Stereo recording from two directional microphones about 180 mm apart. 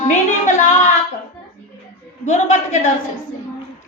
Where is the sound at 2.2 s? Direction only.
40° left (ahead or behind).